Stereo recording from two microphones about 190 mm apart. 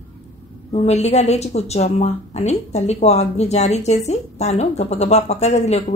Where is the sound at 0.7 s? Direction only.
35° left (ahead or behind).